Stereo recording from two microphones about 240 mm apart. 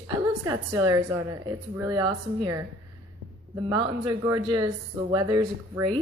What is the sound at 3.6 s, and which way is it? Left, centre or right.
Speech, centre.